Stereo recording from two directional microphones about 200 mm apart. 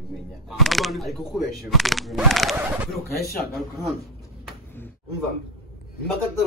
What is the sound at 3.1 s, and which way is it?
Speech, 50° left (ahead or behind).